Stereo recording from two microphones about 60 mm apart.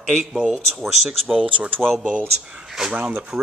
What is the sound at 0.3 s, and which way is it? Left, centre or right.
Speech, centre.